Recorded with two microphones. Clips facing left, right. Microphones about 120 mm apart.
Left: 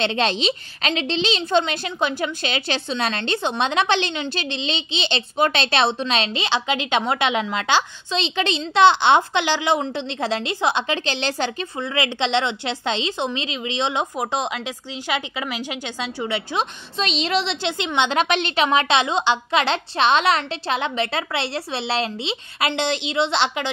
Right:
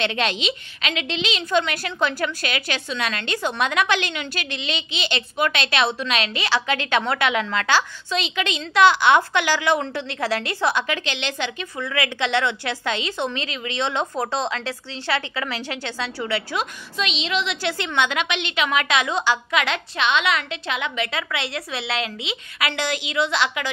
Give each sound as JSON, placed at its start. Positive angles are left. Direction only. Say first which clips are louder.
{"t": 0.0, "sound": "a woman's voice", "louder": "left 3 dB", "side_deg": 30}
{"t": 17.0, "sound": "a woman's voice", "louder": "left 3 dB", "side_deg": 40}
{"t": 17.6, "sound": "a woman's voice", "louder": "left 1 dB", "side_deg": 20}
{"t": 18.1, "sound": "a woman's voice", "louder": "left 5 dB", "side_deg": 40}